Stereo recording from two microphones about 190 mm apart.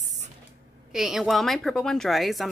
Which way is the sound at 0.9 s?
Centre (ahead or behind).